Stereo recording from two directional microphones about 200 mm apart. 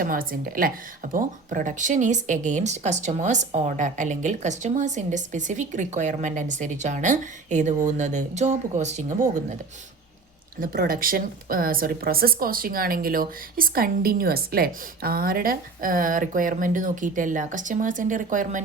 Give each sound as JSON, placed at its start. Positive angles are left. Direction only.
{"t": 0.0, "sound": "speech", "side_deg": -45}
{"t": 10.6, "sound": "a woman's voice", "side_deg": -45}